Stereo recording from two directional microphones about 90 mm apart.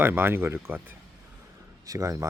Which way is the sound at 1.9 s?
35° right (ahead or behind).